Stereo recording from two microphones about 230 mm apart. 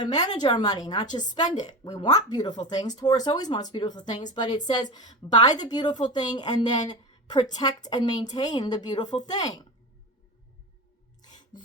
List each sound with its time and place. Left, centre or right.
0.0 s a woman's voice: centre
11.5 s filing: centre